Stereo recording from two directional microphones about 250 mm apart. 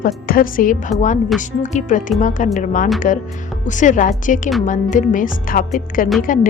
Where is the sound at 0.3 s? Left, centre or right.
Left.